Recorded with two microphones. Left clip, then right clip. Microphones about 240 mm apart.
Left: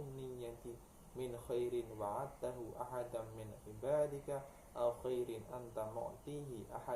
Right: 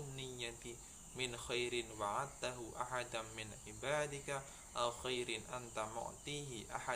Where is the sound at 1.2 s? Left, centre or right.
Right.